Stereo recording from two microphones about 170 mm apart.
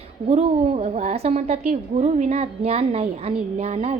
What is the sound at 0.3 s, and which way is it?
A woman's voice, 40° right (ahead or behind).